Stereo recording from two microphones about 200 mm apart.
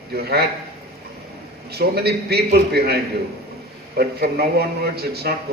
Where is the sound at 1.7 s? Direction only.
50° right (ahead or behind).